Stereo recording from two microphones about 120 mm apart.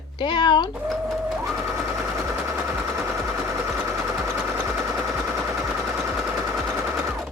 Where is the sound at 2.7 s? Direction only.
20° right (ahead or behind).